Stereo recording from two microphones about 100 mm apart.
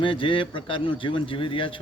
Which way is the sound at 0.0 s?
55° left (ahead or behind).